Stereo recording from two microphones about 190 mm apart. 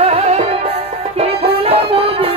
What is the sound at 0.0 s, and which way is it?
Music, 35° right (ahead or behind).